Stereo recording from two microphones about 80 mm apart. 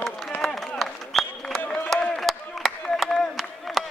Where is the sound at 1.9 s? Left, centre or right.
Centre.